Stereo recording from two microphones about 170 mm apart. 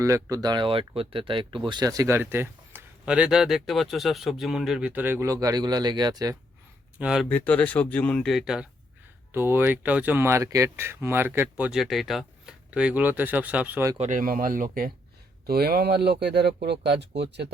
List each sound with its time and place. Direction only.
0.0 s speech: 20° right (ahead or behind)
7.0 s speech: 5° right (ahead or behind)
7.3 s speech: 10° left (ahead or behind)
9.3 s speech: 15° right (ahead or behind)
14.0 s speech: 50° right (ahead or behind); by 17.5 s 85° right